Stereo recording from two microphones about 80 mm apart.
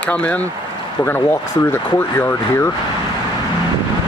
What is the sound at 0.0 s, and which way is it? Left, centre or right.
Speech, centre.